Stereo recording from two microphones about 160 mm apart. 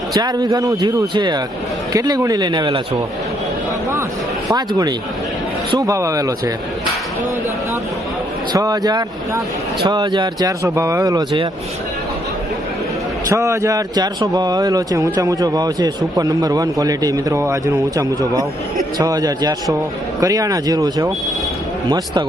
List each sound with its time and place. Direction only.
0.1 s speech: 25° right (ahead or behind)
4.5 s speech: 25° right (ahead or behind)
8.5 s speech: 20° right (ahead or behind)
13.2 s speech: 20° right (ahead or behind)